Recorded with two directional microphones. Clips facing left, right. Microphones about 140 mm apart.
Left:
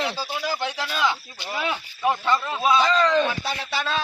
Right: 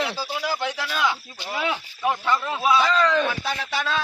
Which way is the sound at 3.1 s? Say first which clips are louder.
Left 1 dB; 15° left (ahead or behind).